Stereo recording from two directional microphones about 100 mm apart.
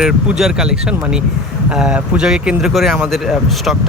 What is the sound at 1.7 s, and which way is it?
Speech, 10° right (ahead or behind).